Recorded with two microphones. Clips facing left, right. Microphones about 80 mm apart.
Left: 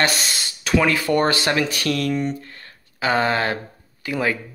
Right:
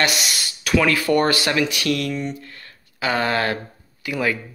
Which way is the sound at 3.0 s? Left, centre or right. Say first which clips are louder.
Left 1 dB; left.